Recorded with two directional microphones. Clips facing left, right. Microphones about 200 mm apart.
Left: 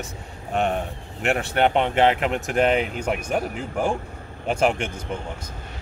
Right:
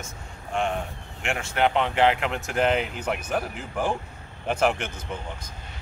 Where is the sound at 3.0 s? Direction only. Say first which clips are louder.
Left 3 dB; 10° left (ahead or behind).